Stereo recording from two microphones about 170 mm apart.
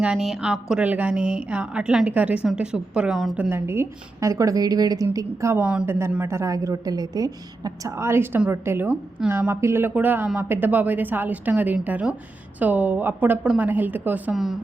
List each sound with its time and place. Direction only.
0.0 s a woman's voice: 5° right (ahead or behind)
3.5 s a woman's voice: 15° right (ahead or behind)